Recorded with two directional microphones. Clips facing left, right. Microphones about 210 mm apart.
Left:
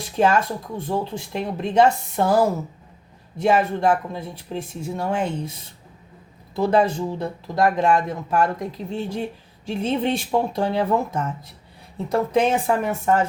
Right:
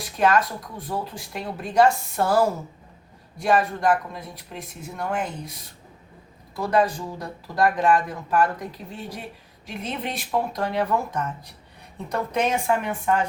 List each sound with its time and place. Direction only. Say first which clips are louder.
0.2 s speech: left 2 dB; 25° left (ahead or behind)